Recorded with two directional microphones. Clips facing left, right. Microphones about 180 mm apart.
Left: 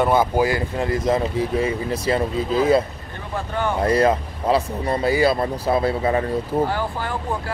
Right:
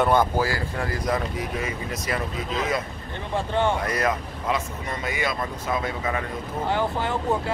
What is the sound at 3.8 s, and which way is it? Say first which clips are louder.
Speech: left 8 dB; 30° left (ahead or behind).